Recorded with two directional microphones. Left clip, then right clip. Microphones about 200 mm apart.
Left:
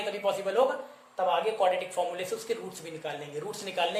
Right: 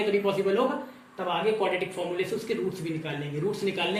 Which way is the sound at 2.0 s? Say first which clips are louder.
Right 1 dB; 30° left (ahead or behind).